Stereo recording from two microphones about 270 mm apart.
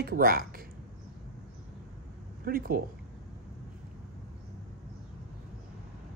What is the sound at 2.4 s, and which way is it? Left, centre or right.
Speech, right.